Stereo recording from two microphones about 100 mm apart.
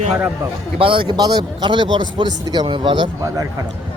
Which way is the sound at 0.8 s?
60° right (ahead or behind).